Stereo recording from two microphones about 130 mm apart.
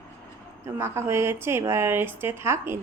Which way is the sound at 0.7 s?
20° right (ahead or behind).